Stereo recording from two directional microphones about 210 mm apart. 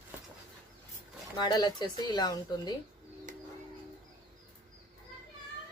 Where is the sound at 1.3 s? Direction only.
20° left (ahead or behind).